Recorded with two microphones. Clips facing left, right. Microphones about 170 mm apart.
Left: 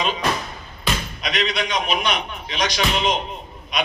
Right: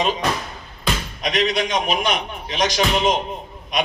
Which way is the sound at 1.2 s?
40° right (ahead or behind).